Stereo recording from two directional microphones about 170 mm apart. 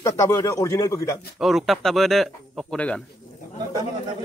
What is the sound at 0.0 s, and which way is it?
Speech, 15° left (ahead or behind).